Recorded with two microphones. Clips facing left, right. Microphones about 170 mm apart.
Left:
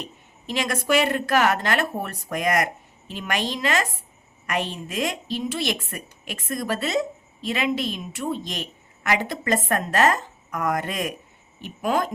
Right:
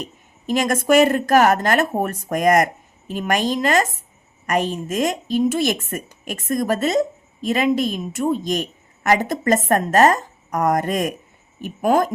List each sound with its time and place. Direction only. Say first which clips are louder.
0.0 s a woman's voice: right 5 dB; 45° right (ahead or behind)